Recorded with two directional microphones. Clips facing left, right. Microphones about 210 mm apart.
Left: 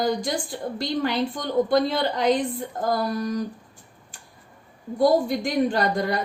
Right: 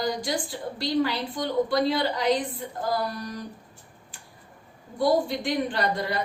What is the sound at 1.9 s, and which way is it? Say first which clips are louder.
Speech: left 2 dB; 50° left (ahead or behind).